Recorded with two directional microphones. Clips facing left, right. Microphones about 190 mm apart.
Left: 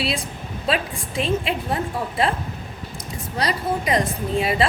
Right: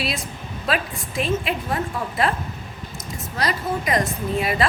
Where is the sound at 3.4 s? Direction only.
30° left (ahead or behind).